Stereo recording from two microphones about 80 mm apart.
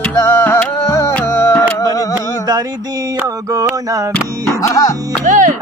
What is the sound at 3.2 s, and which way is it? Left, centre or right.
Mantra, right.